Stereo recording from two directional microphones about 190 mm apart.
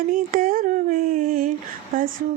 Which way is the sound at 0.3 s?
45° right (ahead or behind).